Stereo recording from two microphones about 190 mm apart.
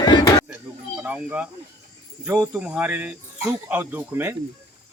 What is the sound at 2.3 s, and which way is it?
Cricket, 10° right (ahead or behind).